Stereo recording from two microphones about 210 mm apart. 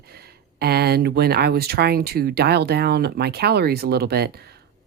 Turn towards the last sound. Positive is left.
turn(degrees=-50)  # may be behind; listen again after turning